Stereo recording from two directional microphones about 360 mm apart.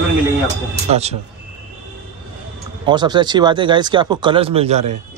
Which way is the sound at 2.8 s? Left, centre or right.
Centre.